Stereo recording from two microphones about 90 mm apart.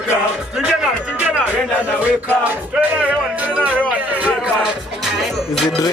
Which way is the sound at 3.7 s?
15° right (ahead or behind).